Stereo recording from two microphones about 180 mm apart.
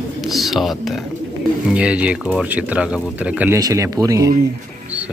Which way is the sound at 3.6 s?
20° right (ahead or behind).